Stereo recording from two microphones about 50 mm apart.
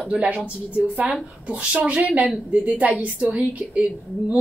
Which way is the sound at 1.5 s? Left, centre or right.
Right.